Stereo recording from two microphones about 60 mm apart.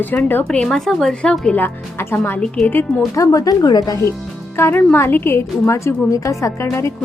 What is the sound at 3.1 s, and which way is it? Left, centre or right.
Speech, left.